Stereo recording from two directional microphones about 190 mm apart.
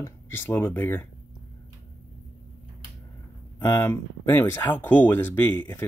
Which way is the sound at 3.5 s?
15° left (ahead or behind).